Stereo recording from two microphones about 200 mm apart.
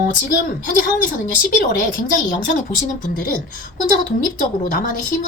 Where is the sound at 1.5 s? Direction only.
40° left (ahead or behind).